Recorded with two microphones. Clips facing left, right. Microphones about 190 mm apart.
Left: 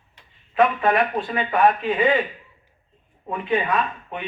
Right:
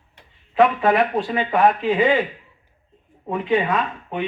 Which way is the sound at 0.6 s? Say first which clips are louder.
Right 2 dB; 25° right (ahead or behind).